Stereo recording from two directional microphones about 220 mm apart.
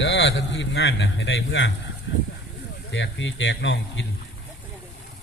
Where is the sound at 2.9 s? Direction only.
55° left (ahead or behind).